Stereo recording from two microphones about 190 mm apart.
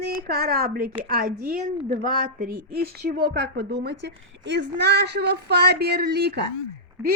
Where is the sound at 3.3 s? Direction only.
65° right (ahead or behind).